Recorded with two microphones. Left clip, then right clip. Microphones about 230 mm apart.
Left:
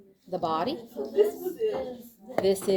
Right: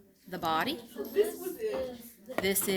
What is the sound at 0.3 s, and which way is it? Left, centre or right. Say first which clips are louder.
Speech: left 3 dB; right.